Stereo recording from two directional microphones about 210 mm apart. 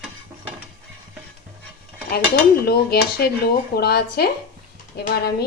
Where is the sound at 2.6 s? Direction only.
50° left (ahead or behind).